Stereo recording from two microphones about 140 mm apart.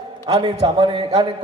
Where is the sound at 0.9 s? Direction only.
50° right (ahead or behind).